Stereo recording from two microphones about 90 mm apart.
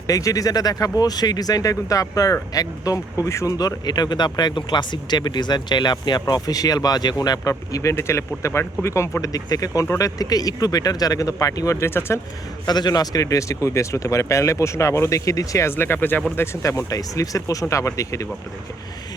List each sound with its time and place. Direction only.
0.1 s speech: 40° left (ahead or behind)
12.6 s speech: 50° left (ahead or behind); by 18.3 s 35° left (ahead or behind)